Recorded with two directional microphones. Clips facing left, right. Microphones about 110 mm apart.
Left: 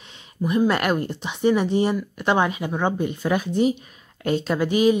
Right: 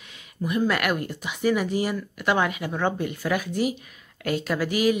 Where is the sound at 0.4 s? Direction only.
25° left (ahead or behind).